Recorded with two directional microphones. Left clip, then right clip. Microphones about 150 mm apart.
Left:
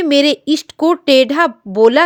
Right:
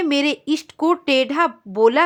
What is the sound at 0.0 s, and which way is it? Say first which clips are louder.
Speech: left 7 dB; 30° left (ahead or behind).